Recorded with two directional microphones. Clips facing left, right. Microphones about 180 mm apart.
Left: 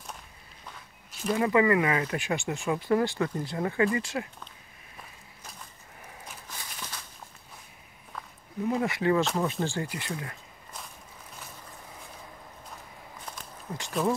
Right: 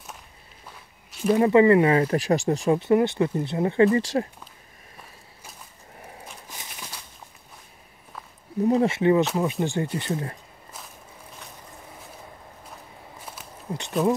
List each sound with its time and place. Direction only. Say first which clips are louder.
1.4 s speech: right 7 dB; 30° right (ahead or behind)
6.5 s walk: left 1 dB; 15° right (ahead or behind)
8.6 s speech: right 6 dB; 30° right (ahead or behind)
13.2 s walk: even; 5° right (ahead or behind)
13.7 s speech: right 6 dB; 30° right (ahead or behind)